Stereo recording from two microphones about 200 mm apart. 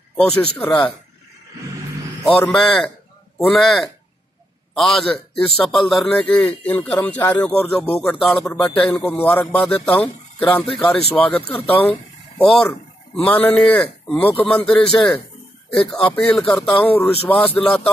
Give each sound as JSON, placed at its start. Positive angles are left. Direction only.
{"t": 0.6, "sound": "a man's voice", "side_deg": 10}
{"t": 2.2, "sound": "a man's voice", "side_deg": 5}